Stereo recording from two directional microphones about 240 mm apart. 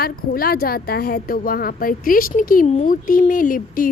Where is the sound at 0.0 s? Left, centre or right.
Left.